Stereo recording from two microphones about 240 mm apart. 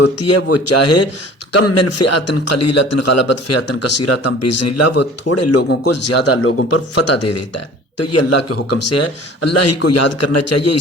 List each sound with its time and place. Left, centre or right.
0.2 s a man's voice: left
4.4 s a man's voice: left
7.1 s speech: left